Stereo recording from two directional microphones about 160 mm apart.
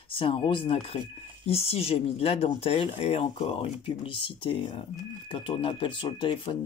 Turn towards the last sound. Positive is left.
turn(degrees=30)  # may be behind; listen again after turning